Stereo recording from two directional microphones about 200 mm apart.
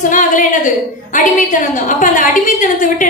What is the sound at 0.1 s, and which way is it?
Speech, 40° left (ahead or behind).